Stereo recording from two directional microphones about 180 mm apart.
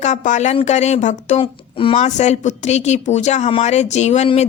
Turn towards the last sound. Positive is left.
turn(degrees=40)  # may be behind; listen again after turning